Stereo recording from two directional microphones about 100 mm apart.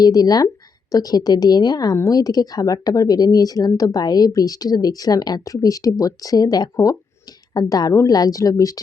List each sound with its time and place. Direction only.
0.0 s speech: 40° left (ahead or behind)